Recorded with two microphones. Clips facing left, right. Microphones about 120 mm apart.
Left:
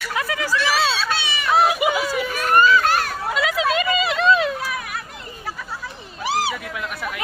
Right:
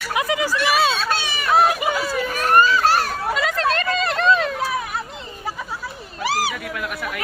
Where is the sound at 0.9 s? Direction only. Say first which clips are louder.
Right 1 dB; 45° right (ahead or behind).